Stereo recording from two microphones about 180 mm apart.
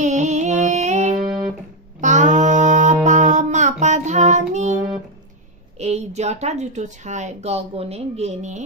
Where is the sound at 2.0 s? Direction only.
45° right (ahead or behind).